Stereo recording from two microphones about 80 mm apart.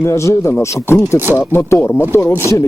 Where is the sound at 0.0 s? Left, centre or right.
Left.